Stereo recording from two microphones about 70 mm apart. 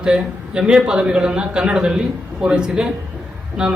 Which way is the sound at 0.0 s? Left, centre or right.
Centre.